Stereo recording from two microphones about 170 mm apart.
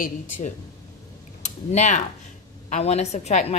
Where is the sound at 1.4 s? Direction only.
45° left (ahead or behind).